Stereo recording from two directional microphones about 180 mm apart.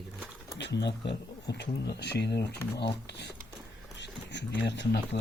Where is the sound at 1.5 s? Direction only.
70° left (ahead or behind).